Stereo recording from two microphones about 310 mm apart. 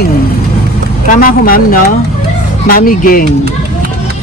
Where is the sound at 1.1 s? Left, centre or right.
Left.